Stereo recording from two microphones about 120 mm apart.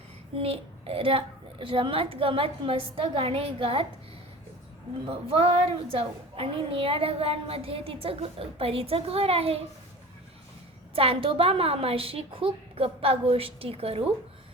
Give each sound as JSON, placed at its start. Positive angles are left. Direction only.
{"t": 0.3, "sound": "a woman's voice", "side_deg": -50}
{"t": 5.0, "sound": "a woman's voice", "side_deg": -50}
{"t": 10.9, "sound": "a woman's voice", "side_deg": -50}